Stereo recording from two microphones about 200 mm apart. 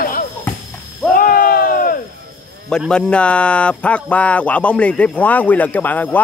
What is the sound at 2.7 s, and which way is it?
Speech, 5° left (ahead or behind).